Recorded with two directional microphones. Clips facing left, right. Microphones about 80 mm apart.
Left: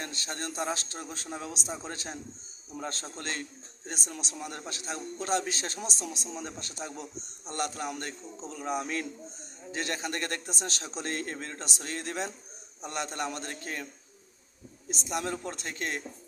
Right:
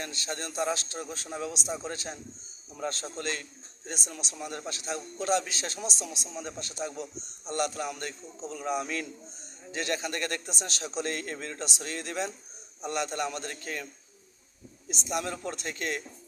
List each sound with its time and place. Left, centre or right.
0.0 s a man's voice: left
1.3 s a man's voice: left
14.8 s a man's voice: left